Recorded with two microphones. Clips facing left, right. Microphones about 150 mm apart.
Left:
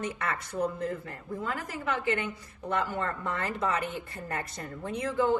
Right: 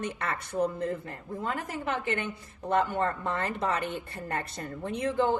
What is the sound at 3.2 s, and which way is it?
Speech, 25° right (ahead or behind).